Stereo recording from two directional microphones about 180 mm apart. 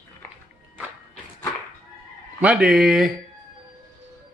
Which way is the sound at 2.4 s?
5° right (ahead or behind).